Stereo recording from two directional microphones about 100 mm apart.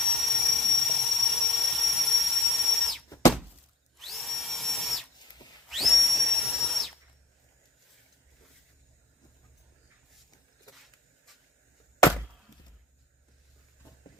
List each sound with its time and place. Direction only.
0.0 s jet engine: centre (ahead or behind)
3.9 s drill: centre (ahead or behind)
5.6 s whistle: centre (ahead or behind)
10.7 s a sound: 35° left (ahead or behind)
11.9 s chop: 30° left (ahead or behind)